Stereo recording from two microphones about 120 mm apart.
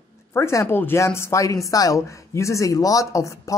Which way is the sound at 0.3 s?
25° left (ahead or behind).